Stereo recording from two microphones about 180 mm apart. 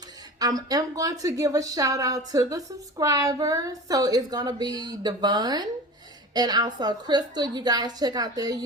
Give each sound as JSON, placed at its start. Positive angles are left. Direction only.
{"t": 0.3, "sound": "speech", "side_deg": -20}